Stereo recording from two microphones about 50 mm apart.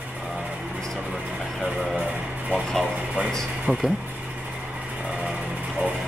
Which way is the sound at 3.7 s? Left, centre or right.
Right.